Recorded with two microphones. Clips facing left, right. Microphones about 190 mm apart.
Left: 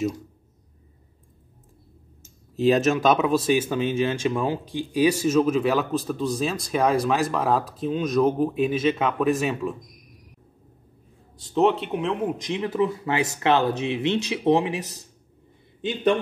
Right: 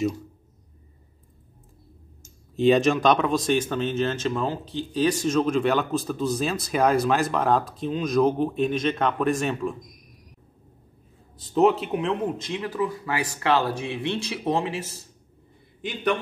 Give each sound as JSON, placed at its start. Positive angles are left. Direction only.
{"t": 2.5, "sound": "speech", "side_deg": 0}
{"t": 11.3, "sound": "speech", "side_deg": 0}
{"t": 12.4, "sound": "speech", "side_deg": 20}